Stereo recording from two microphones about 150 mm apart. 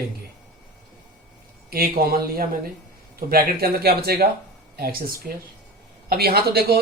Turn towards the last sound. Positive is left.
turn(degrees=-90)